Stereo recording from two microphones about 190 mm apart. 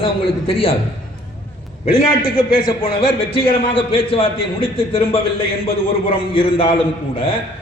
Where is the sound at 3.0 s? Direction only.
30° left (ahead or behind).